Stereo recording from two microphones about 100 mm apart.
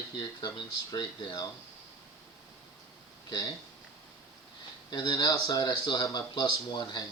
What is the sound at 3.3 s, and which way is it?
Speech, 40° left (ahead or behind).